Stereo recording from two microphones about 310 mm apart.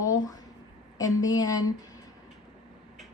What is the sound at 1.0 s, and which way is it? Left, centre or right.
Speech, centre.